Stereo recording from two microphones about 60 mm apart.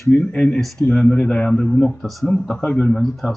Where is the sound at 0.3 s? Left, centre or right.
Centre.